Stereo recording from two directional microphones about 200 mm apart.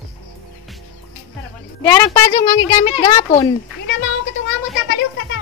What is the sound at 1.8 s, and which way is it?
A woman's voice, 15° left (ahead or behind).